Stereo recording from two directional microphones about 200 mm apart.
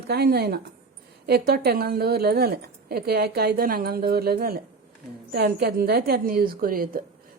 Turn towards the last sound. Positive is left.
turn(degrees=-45)  # may be behind; listen again after turning